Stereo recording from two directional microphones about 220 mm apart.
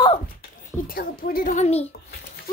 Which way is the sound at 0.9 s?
45° left (ahead or behind).